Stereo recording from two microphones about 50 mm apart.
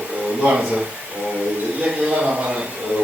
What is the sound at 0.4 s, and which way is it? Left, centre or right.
A man's voice, right.